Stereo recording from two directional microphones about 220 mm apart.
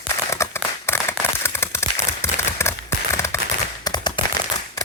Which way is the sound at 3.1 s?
10° left (ahead or behind).